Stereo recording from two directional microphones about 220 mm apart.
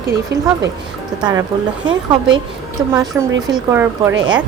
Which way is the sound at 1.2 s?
20° right (ahead or behind).